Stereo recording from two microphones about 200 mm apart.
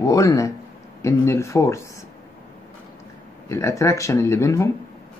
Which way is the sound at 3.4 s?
15° left (ahead or behind).